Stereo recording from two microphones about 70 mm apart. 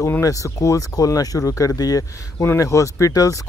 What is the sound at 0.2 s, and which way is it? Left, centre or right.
Speech, left.